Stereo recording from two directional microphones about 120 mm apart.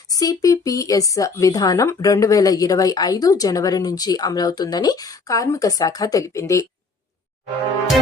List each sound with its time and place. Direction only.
0.1 s speech: 30° left (ahead or behind)